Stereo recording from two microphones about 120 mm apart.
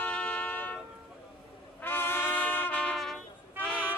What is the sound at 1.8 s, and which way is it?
Brass instrument, 20° left (ahead or behind).